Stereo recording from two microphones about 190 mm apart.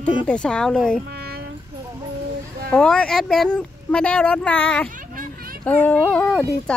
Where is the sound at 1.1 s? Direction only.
55° right (ahead or behind).